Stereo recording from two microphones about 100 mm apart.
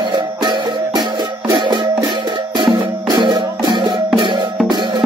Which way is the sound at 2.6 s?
50° right (ahead or behind).